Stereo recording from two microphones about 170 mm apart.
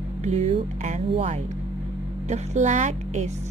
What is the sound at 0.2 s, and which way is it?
Speech, 40° right (ahead or behind).